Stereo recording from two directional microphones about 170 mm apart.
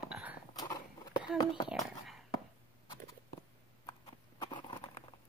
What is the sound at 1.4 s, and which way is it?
Speech, 25° left (ahead or behind).